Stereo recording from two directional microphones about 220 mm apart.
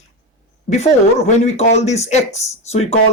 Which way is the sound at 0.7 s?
30° left (ahead or behind).